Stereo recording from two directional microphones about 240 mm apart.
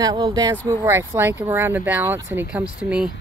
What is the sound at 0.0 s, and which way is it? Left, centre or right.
Speech, centre.